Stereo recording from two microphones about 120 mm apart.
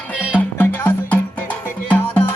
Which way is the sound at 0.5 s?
15° left (ahead or behind).